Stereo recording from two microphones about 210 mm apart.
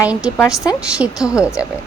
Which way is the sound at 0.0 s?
5° right (ahead or behind).